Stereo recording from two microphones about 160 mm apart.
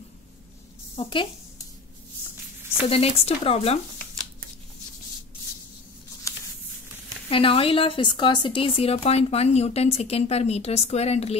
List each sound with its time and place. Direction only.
0.9 s speech: 35° left (ahead or behind)
2.9 s speech: 40° left (ahead or behind)
6.3 s a sound: 20° left (ahead or behind)
7.2 s speech: 35° left (ahead or behind)